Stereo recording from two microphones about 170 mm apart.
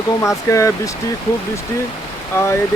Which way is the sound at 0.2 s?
15° left (ahead or behind).